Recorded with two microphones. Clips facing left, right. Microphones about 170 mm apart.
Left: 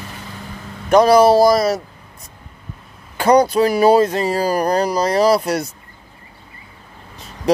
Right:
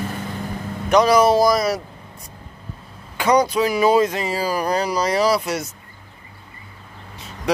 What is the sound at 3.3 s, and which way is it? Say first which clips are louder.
Speech: left 4 dB; 55° left (ahead or behind).